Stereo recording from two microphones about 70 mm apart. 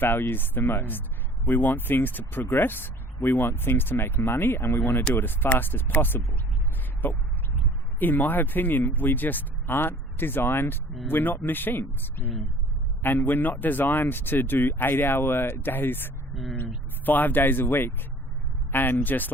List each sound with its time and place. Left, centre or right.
0.0 s speech: left
16.3 s speech: centre
17.1 s speech: left